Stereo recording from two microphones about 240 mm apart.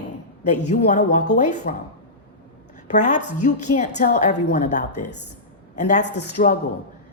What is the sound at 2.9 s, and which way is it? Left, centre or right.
A woman's voice, left.